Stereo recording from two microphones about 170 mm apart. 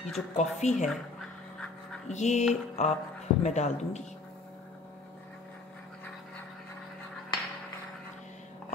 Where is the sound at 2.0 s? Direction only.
45° left (ahead or behind).